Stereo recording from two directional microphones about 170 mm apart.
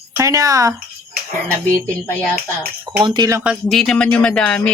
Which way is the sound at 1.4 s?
10° left (ahead or behind).